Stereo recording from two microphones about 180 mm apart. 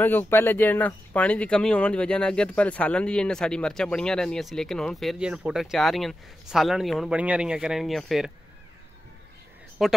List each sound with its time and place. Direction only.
0.0 s speech: 10° left (ahead or behind)
9.8 s speech: centre (ahead or behind)